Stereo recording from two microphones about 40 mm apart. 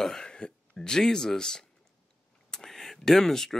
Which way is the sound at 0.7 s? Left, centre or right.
Centre.